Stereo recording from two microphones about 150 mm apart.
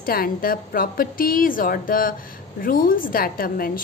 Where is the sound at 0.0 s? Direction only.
75° left (ahead or behind).